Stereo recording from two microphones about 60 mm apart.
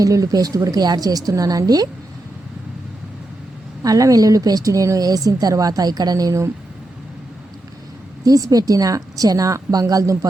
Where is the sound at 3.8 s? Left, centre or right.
Right.